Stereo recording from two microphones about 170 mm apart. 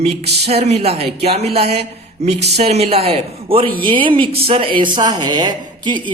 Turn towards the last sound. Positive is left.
turn(degrees=-25)  # may be behind; listen again after turning